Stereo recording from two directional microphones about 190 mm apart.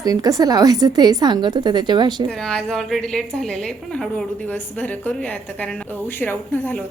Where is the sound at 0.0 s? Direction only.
20° right (ahead or behind).